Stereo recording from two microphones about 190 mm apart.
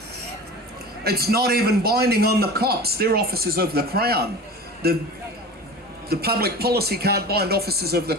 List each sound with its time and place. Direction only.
1.0 s a man's voice: 55° right (ahead or behind)
6.1 s a man's voice: 55° right (ahead or behind)